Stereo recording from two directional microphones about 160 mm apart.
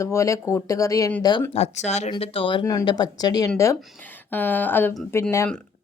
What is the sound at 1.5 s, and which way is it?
Speech, 40° left (ahead or behind).